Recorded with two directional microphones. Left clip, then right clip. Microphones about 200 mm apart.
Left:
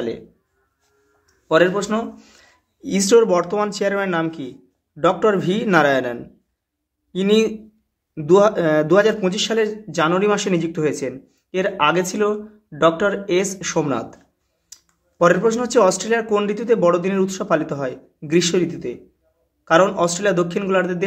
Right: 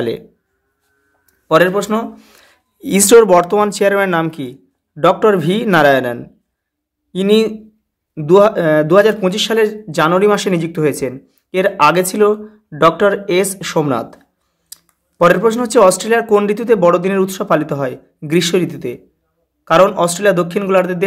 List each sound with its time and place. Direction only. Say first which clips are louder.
1.5 s a man's voice: right 4 dB; 25° right (ahead or behind)
15.2 s a man's voice: right 4 dB; 20° right (ahead or behind)